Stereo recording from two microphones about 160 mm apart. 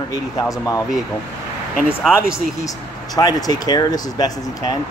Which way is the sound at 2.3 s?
20° left (ahead or behind).